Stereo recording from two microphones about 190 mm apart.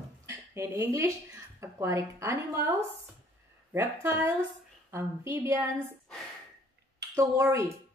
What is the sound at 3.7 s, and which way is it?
Speech, 10° right (ahead or behind).